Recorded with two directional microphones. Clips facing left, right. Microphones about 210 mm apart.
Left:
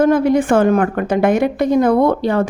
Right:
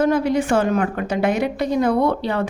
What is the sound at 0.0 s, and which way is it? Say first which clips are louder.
A woman's voice: left 5 dB; 50° left (ahead or behind).